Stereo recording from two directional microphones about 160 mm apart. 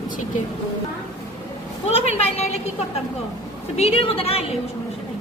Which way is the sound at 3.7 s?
40° left (ahead or behind).